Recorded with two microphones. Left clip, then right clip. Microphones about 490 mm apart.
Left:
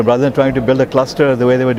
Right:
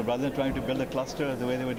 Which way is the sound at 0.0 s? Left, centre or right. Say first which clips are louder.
Left 16 dB; left.